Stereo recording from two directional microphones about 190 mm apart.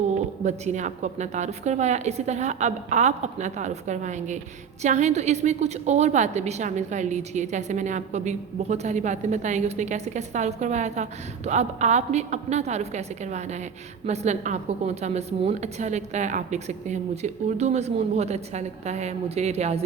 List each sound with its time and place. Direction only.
0.4 s a woman's voice: 40° right (ahead or behind)